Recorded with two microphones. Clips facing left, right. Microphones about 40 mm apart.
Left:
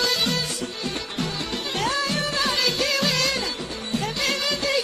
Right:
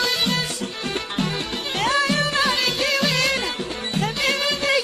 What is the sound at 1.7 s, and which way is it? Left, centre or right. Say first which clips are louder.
Music: right 5 dB; right.